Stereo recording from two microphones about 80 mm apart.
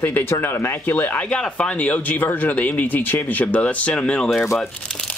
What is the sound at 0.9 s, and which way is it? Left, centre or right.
Speech, centre.